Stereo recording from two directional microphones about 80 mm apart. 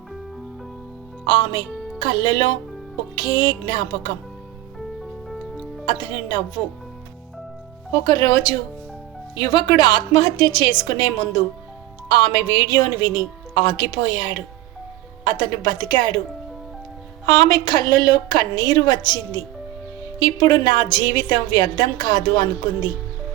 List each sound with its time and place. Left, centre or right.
1.2 s a woman's voice: left
5.8 s a woman's voice: left
7.9 s a woman's voice: left
17.2 s a woman's voice: left